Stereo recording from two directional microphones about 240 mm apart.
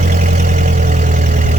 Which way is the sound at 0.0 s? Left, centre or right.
Right.